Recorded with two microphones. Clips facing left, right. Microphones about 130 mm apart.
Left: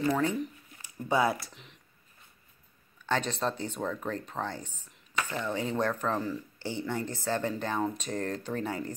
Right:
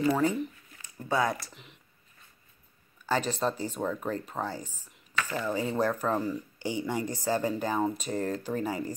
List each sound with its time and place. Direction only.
0.0 s speech: 5° right (ahead or behind)
0.8 s speech: 10° left (ahead or behind)
3.1 s speech: 5° right (ahead or behind)